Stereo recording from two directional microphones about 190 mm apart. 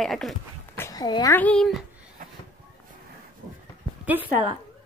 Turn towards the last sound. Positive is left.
turn(degrees=-10)  # may be behind; listen again after turning